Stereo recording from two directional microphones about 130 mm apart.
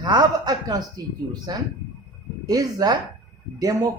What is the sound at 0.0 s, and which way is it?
Speech, 30° right (ahead or behind).